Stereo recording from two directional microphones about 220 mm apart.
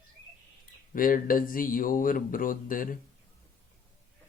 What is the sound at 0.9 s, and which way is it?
Speech, 40° left (ahead or behind).